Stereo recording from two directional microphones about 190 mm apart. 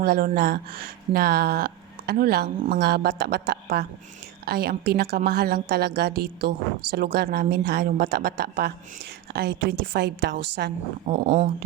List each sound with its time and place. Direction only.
0.0 s a woman's voice: 50° right (ahead or behind)
11.1 s speech: 35° right (ahead or behind)